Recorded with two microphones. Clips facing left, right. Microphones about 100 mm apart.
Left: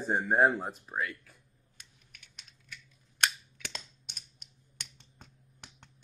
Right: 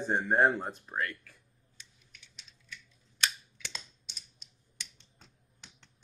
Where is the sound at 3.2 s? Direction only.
55° left (ahead or behind).